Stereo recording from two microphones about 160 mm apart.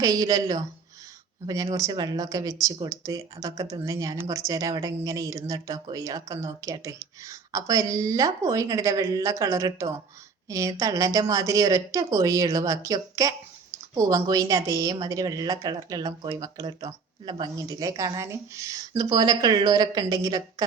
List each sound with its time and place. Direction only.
0.0 s speech: 20° right (ahead or behind)